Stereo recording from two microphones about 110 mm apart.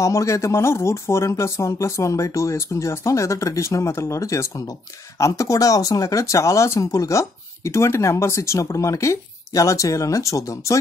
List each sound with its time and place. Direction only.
0.0 s speech: 25° left (ahead or behind)